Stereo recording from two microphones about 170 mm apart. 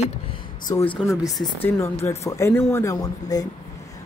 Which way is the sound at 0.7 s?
25° left (ahead or behind).